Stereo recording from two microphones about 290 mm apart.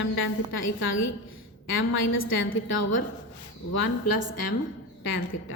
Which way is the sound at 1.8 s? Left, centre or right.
Left.